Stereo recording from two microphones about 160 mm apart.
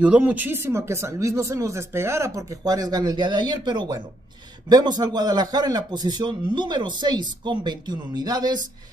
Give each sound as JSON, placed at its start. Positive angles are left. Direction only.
{"t": 0.0, "sound": "speech", "side_deg": -10}